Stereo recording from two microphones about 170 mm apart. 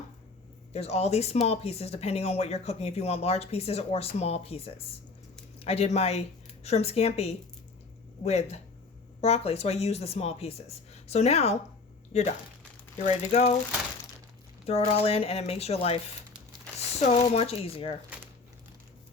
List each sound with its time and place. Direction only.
0.7 s speech: 40° left (ahead or behind)
13.3 s speech: 35° left (ahead or behind)
14.7 s speech: 35° left (ahead or behind)
16.7 s a sound: 5° left (ahead or behind)
17.1 s speech: 35° left (ahead or behind)